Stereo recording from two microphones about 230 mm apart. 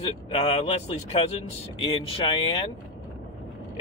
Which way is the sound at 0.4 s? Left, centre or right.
Left.